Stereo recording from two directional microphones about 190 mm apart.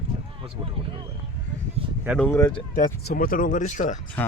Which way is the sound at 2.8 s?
45° left (ahead or behind).